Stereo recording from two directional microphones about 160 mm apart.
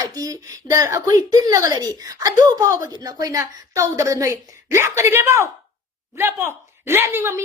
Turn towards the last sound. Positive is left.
turn(degrees=-15)  # may be behind; listen again after turning